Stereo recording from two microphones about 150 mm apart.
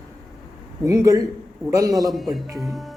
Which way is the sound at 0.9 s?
20° right (ahead or behind).